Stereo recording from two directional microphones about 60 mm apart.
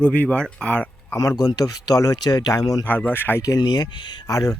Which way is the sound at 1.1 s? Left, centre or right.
Left.